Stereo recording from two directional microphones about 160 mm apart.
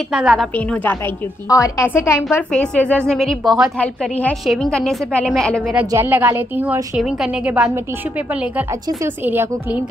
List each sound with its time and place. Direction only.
0.1 s a woman's voice: 5° right (ahead or behind); by 2.2 s 15° left (ahead or behind)
2.3 s a woman's voice: 5° left (ahead or behind)
3.8 s a woman's voice: 10° left (ahead or behind)
5.6 s a woman's voice: 10° right (ahead or behind)